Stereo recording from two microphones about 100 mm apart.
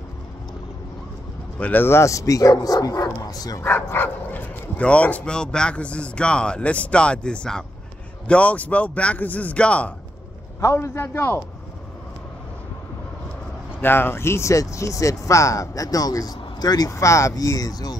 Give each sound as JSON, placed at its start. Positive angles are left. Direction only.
{"t": 1.6, "sound": "speech", "side_deg": 20}
{"t": 3.6, "sound": "speech", "side_deg": 20}
{"t": 10.6, "sound": "a man's voice", "side_deg": 30}
{"t": 13.7, "sound": "speech", "side_deg": 20}